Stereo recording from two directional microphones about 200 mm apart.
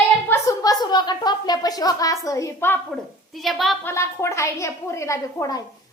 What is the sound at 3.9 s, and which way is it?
A woman's voice, 15° left (ahead or behind).